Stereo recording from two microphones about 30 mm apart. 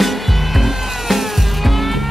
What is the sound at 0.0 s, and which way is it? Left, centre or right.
Music, centre.